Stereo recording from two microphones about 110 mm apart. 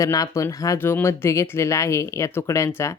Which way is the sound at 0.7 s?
20° left (ahead or behind).